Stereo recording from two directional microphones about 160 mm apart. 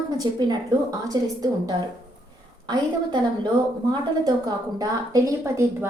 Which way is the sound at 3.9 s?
25° right (ahead or behind).